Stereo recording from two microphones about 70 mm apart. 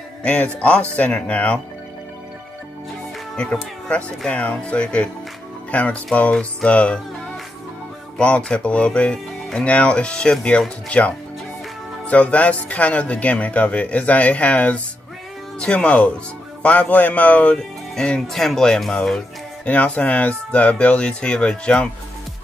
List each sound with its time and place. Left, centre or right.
0.2 s speech: centre
3.3 s speech: centre
8.2 s speech: centre